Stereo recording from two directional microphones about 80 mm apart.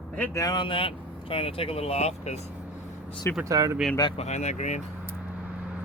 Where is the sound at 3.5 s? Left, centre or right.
Right.